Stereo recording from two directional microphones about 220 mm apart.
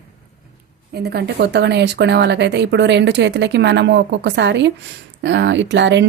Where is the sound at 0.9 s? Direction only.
50° right (ahead or behind).